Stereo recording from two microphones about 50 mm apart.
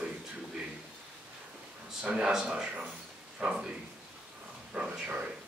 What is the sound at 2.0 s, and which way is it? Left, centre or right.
Speech, centre.